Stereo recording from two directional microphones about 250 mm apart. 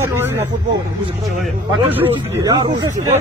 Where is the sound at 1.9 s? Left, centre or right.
Centre.